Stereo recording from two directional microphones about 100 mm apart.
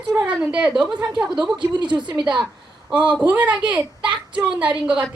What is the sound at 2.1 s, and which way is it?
Speech, 5° right (ahead or behind).